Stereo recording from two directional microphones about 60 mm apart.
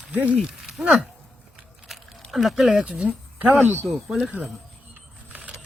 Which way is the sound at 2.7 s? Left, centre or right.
Centre.